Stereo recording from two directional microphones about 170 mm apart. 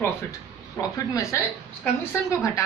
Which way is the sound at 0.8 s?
20° left (ahead or behind).